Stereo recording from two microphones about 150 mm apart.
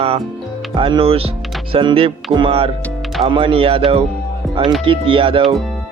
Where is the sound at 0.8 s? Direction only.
35° right (ahead or behind).